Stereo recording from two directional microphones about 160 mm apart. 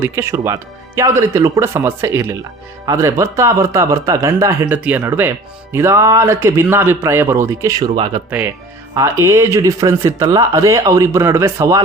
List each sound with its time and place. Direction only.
0.0 s speech: 15° right (ahead or behind)
9.0 s speech: 15° right (ahead or behind)